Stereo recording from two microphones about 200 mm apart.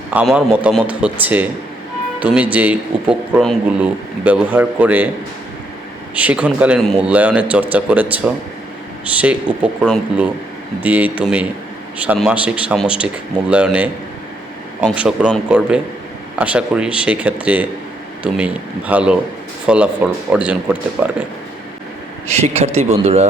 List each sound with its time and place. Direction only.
0.1 s a man's voice: 5° right (ahead or behind)
6.1 s a man's voice: 5° right (ahead or behind)
22.3 s speech: 30° right (ahead or behind)